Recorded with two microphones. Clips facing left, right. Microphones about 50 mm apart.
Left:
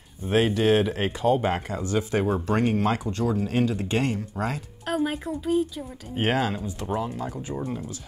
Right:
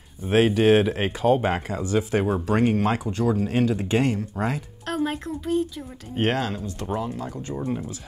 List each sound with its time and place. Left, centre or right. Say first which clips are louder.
0.3 s speech: right 3 dB; centre
0.7 s speech: right 3 dB; centre
4.8 s speech: even; centre